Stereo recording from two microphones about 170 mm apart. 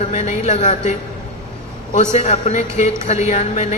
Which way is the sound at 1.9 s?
40° left (ahead or behind).